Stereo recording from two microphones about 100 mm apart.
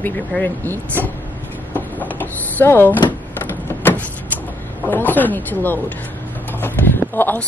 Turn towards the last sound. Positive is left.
turn(degrees=20)  # may be behind; listen again after turning